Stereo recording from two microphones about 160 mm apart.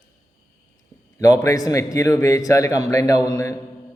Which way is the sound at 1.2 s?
20° left (ahead or behind).